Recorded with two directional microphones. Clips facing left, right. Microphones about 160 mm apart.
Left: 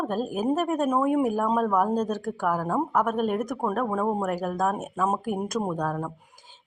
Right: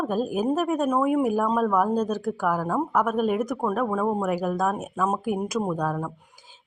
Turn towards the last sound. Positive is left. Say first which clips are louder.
# right 1 dB
turn(degrees=0)  # may be behind; listen again after turning